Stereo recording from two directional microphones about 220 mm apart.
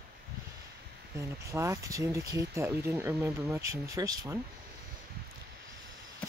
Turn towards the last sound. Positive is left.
turn(degrees=-15)  # may be behind; listen again after turning